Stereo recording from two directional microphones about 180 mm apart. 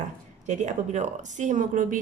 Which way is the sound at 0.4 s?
40° right (ahead or behind).